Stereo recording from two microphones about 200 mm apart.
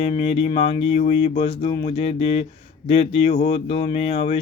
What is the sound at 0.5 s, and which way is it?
Speech, 35° left (ahead or behind).